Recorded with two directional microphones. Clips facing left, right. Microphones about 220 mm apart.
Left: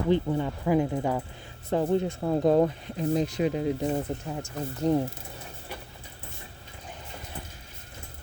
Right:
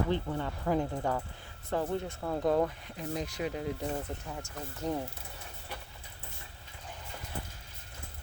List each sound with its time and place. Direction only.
0.1 s speech: 15° left (ahead or behind)
1.7 s speech: 20° left (ahead or behind)